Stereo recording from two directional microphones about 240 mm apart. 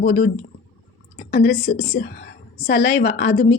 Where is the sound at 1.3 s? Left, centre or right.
Left.